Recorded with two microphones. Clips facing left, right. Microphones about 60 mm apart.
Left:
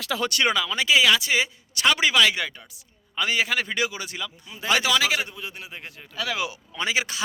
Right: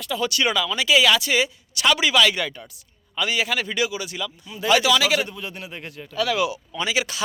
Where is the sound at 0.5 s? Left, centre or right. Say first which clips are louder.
Right 4 dB; left.